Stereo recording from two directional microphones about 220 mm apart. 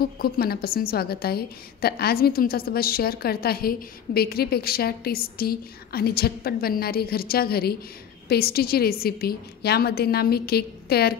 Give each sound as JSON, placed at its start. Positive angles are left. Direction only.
{"t": 0.2, "sound": "a woman's voice", "side_deg": 45}